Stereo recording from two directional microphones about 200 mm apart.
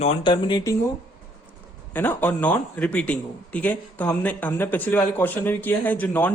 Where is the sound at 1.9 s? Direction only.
10° left (ahead or behind).